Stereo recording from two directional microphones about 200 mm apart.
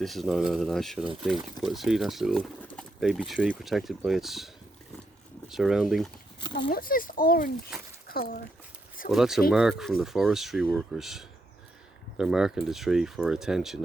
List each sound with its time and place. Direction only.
0.0 s speech: centre (ahead or behind)
6.7 s a child's voice: 45° left (ahead or behind)
7.7 s a sound: centre (ahead or behind)
9.0 s speech: centre (ahead or behind)